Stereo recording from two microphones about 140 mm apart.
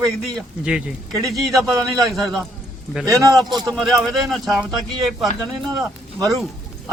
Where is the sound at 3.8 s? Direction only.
Centre (ahead or behind).